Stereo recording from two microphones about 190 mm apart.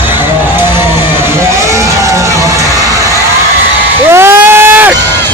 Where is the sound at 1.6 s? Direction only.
15° right (ahead or behind).